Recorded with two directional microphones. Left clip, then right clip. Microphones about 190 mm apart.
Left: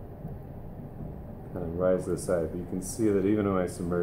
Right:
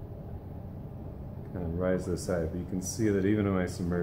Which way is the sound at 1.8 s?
25° right (ahead or behind).